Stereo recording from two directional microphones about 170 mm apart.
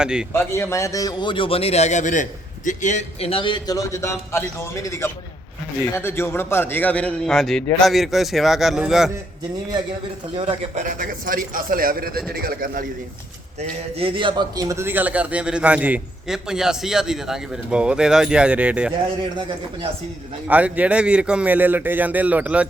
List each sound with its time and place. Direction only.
0.0 s a man's voice: 5° right (ahead or behind)
0.3 s a man's voice: 15° left (ahead or behind); by 9.1 s 5° right (ahead or behind)
10.8 s a man's voice: 55° right (ahead or behind)
13.6 s a man's voice: 35° right (ahead or behind); by 18.9 s 5° right (ahead or behind)
20.5 s a man's voice: 10° right (ahead or behind)